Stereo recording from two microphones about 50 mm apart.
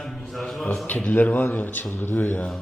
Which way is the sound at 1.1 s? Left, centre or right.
Left.